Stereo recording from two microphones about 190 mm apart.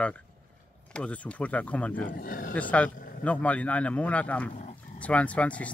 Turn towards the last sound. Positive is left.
turn(degrees=5)  # may be behind; listen again after turning